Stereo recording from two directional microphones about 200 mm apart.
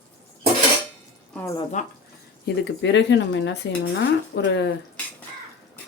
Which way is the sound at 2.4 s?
60° left (ahead or behind).